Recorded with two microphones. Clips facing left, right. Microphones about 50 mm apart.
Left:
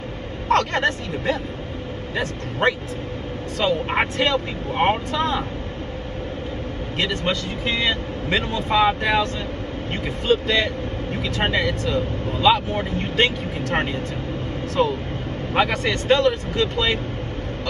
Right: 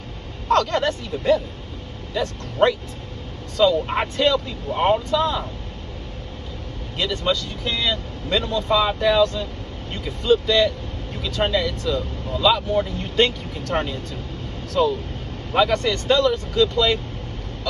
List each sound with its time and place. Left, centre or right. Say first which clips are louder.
0.5 s speech: even; left
3.5 s speech: right 3 dB; left
7.0 s speech: right 1 dB; left